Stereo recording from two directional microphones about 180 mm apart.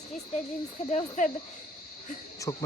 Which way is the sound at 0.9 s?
45° left (ahead or behind).